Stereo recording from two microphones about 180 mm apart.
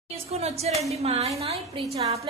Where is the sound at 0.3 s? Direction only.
35° right (ahead or behind).